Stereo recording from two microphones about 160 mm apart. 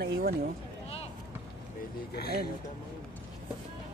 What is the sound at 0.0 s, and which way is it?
Speech, 80° right.